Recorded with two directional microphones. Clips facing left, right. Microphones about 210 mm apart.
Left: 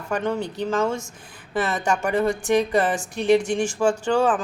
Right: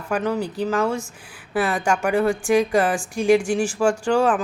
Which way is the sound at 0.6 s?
5° right (ahead or behind).